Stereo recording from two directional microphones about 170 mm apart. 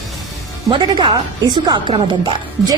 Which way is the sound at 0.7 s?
30° right (ahead or behind).